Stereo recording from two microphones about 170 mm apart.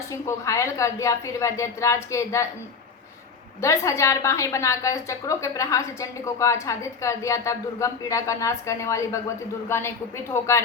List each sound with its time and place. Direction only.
0.1 s a woman's voice: 20° left (ahead or behind)
3.6 s a woman's voice: 15° left (ahead or behind)